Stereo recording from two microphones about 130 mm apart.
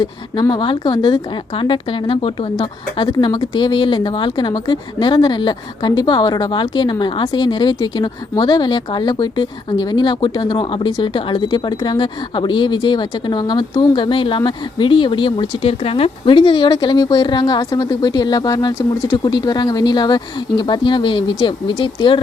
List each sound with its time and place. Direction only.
0.5 s speech: 35° left (ahead or behind)